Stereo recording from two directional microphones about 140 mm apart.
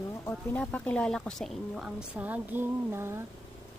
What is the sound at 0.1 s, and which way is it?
A woman's voice, 10° left (ahead or behind).